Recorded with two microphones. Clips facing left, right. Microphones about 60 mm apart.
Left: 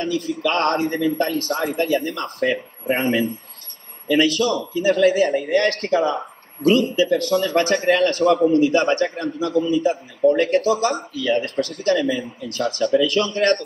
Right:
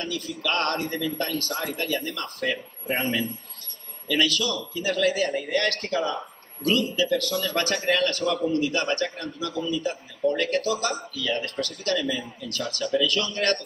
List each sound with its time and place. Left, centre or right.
0.0 s a man's voice: left